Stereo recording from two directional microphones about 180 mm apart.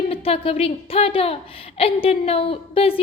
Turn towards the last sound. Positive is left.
turn(degrees=30)  # may be behind; listen again after turning